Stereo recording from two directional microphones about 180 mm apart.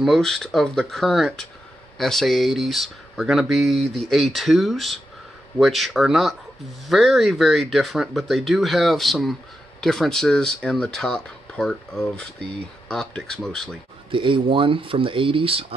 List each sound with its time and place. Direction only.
0.0 s speech: centre (ahead or behind)
14.1 s speech: 30° right (ahead or behind)